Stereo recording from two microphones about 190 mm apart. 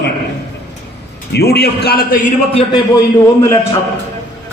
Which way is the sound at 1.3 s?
60° left (ahead or behind).